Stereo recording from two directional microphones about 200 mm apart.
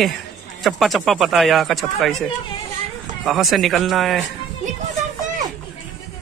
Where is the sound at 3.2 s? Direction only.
Centre (ahead or behind).